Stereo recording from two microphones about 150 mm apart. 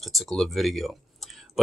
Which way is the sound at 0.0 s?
Centre (ahead or behind).